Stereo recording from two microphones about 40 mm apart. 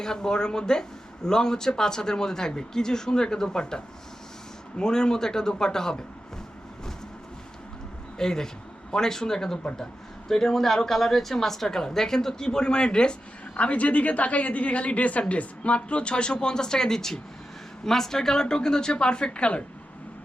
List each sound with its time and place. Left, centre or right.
0.0 s speech: centre
8.2 s speech: centre